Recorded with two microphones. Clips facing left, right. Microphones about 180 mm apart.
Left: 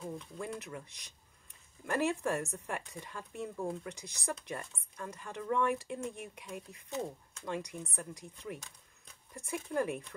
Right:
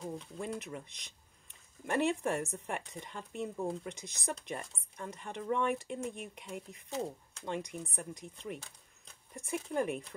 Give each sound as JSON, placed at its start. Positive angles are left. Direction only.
{"t": 0.4, "sound": "speech", "side_deg": -20}